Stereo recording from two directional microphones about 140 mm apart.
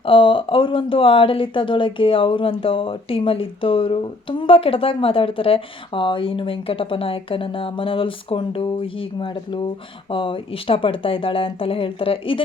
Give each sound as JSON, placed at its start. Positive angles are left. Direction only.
{"t": 0.0, "sound": "speech", "side_deg": 40}